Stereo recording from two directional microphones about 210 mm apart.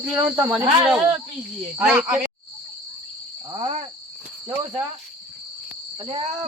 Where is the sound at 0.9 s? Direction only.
5° right (ahead or behind).